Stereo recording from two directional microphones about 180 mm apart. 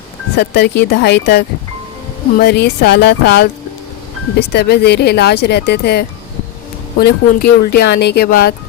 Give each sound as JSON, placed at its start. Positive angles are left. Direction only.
{"t": 0.3, "sound": "speech", "side_deg": 65}
{"t": 4.5, "sound": "speech", "side_deg": 65}